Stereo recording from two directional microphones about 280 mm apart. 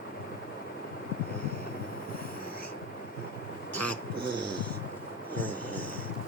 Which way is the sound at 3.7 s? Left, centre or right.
Centre.